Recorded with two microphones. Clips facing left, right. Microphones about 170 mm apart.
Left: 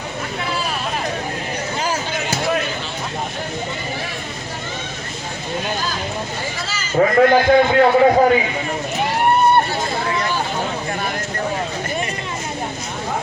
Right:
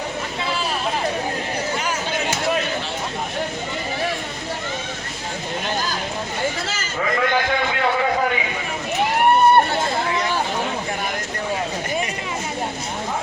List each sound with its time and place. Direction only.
6.9 s a man's voice: 40° left (ahead or behind)